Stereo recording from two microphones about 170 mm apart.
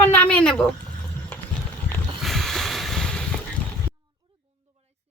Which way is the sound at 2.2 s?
Centre (ahead or behind).